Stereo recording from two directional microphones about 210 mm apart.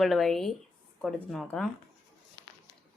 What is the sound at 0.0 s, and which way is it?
Speech, centre (ahead or behind).